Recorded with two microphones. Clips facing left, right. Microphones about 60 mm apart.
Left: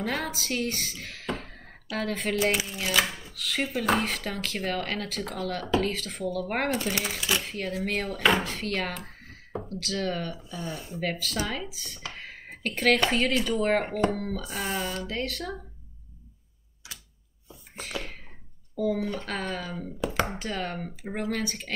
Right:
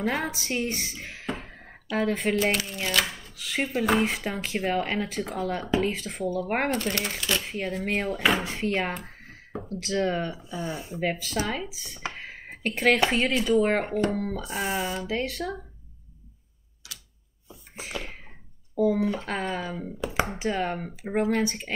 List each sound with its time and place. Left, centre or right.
0.0 s speech: centre
1.4 s a sound: centre
1.9 s speech: centre
2.6 s speech: centre
3.3 s speech: centre
4.1 s speech: centre
5.4 s speech: centre
5.9 s speech: centre
6.7 s speech: centre
7.4 s speech: centre
8.5 s speech: centre
10.3 s speech: centre
17.5 s a sound: centre
18.8 s speech: centre